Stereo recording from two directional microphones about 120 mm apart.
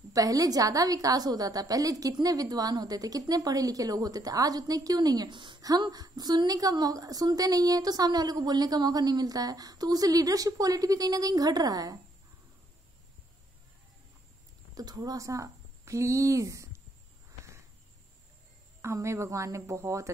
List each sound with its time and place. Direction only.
0.1 s a woman's voice: 30° right (ahead or behind)
14.8 s a woman's voice: 30° right (ahead or behind)
18.8 s a woman's voice: 25° right (ahead or behind)